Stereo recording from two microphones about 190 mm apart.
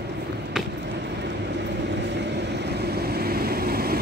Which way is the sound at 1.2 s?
65° right (ahead or behind).